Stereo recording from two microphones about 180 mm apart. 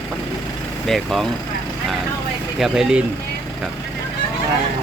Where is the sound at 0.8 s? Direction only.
Centre (ahead or behind).